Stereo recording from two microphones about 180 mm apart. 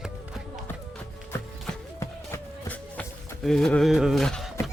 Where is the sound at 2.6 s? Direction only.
10° left (ahead or behind).